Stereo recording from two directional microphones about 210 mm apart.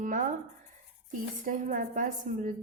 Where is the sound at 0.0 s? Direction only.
40° right (ahead or behind).